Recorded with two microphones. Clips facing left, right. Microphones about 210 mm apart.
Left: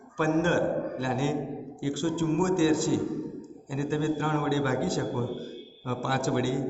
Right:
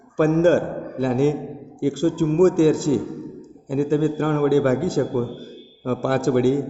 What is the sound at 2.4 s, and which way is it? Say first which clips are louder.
A man's voice: right 7 dB; 40° right (ahead or behind).